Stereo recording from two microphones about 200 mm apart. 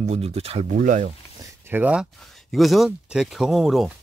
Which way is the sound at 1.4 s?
10° right (ahead or behind).